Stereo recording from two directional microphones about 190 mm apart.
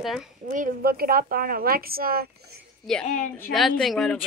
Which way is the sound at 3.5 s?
Centre (ahead or behind).